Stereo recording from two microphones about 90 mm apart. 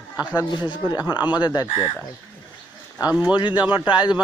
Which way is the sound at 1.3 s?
55° left (ahead or behind).